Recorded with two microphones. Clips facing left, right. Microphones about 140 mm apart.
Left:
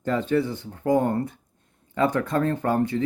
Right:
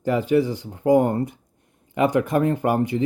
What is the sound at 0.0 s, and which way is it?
Speech, 10° right (ahead or behind).